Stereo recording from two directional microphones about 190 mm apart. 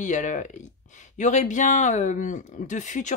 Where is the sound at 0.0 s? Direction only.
40° left (ahead or behind).